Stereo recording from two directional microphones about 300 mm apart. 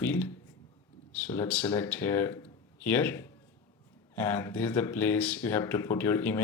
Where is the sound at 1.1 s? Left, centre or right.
Centre.